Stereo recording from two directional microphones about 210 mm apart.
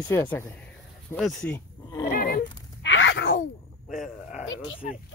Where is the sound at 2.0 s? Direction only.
45° left (ahead or behind).